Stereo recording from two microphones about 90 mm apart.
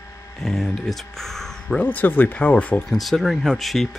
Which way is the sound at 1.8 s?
20° left (ahead or behind).